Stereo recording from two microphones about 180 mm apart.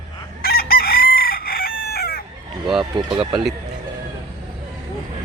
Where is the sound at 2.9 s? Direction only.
25° right (ahead or behind).